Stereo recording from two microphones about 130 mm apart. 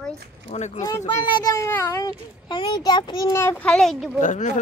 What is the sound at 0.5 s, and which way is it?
Speech, 60° left (ahead or behind).